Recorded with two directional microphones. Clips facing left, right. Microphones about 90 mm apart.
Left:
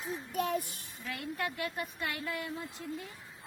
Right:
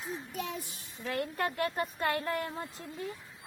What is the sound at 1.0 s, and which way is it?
A woman's voice, 45° right (ahead or behind).